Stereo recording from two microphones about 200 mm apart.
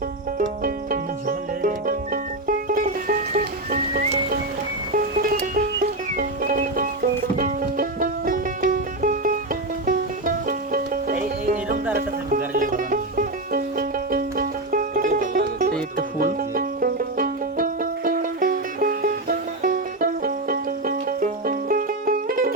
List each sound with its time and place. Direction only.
0.3 s music: 45° right (ahead or behind)